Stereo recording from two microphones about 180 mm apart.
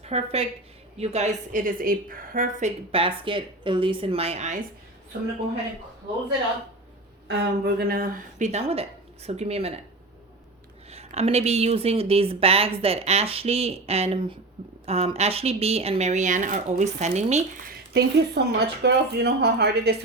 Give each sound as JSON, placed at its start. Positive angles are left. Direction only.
{"t": 0.0, "sound": "a woman's voice", "side_deg": -35}
{"t": 7.3, "sound": "a woman's voice", "side_deg": -65}
{"t": 10.9, "sound": "a woman's voice", "side_deg": -35}
{"t": 17.9, "sound": "a woman's voice", "side_deg": -65}